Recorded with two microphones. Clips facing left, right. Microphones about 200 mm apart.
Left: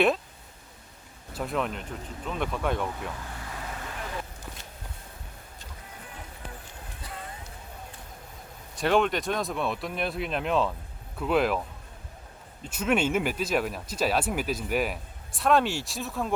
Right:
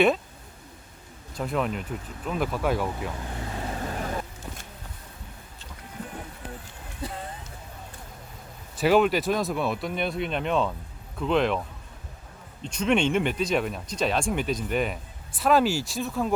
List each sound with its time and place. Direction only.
1.3 s speech: centre (ahead or behind)
3.2 s vehicle: 25° right (ahead or behind)
8.7 s speech: 5° right (ahead or behind)
12.6 s speech: 5° left (ahead or behind)